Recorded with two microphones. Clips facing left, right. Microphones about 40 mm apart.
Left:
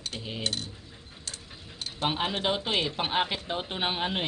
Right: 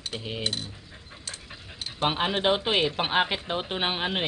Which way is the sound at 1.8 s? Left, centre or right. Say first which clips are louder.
Right 3 dB; centre.